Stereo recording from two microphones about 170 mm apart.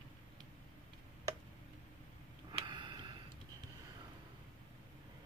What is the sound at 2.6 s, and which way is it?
Sniff, 30° right (ahead or behind).